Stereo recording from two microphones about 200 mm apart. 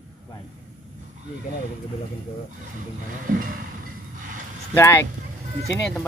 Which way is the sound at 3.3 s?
45° right (ahead or behind).